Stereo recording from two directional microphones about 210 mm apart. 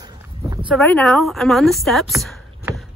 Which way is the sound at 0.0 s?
20° right (ahead or behind).